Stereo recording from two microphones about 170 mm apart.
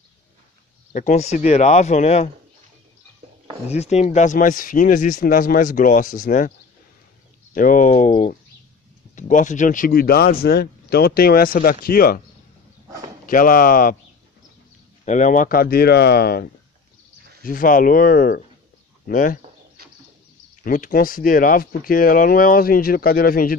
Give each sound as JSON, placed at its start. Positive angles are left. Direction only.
{"t": 0.9, "sound": "speech", "side_deg": 45}
{"t": 3.6, "sound": "speech", "side_deg": 40}
{"t": 7.5, "sound": "speech", "side_deg": 50}
{"t": 13.3, "sound": "speech", "side_deg": 55}
{"t": 15.0, "sound": "speech", "side_deg": 45}
{"t": 19.8, "sound": "bird", "side_deg": -65}
{"t": 20.6, "sound": "speech", "side_deg": 55}